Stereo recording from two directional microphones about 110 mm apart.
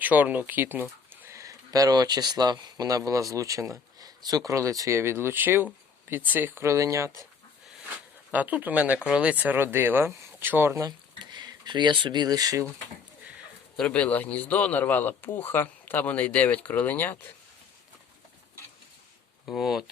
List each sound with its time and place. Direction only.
0.0 s speech: 15° right (ahead or behind)
8.3 s speech: 15° right (ahead or behind)
10.8 s speech: 45° right (ahead or behind)
13.7 s a man's voice: 10° left (ahead or behind)
19.5 s speech: centre (ahead or behind)